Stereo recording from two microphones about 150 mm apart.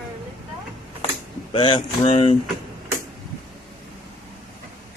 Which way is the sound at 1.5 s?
40° left (ahead or behind).